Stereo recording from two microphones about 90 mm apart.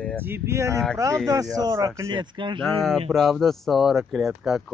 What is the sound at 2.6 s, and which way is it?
Speech, 5° left (ahead or behind).